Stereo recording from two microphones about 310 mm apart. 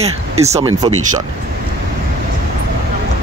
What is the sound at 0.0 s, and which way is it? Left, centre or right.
Speech, centre.